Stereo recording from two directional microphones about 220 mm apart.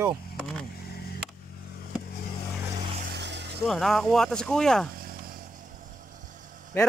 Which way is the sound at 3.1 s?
50° right (ahead or behind).